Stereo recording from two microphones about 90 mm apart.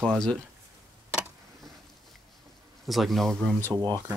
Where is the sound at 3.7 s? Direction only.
25° right (ahead or behind).